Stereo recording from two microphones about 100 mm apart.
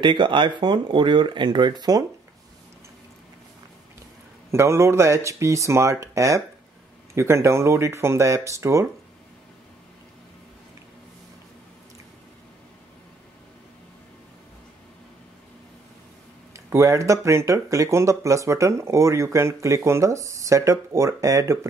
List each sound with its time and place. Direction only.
0.0 s speech: 55° right (ahead or behind)
4.5 s speech: 25° right (ahead or behind)
16.5 s speech: 30° right (ahead or behind)